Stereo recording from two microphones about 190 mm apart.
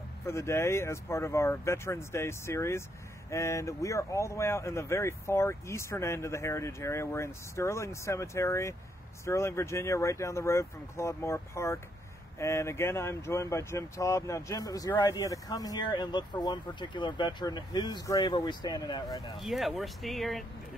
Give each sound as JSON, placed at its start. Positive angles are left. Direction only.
{"t": 0.3, "sound": "speech", "side_deg": 15}
{"t": 19.4, "sound": "speech", "side_deg": 0}